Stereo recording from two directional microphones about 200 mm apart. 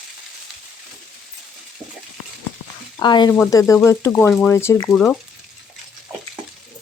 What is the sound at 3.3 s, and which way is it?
Speech, 10° left (ahead or behind).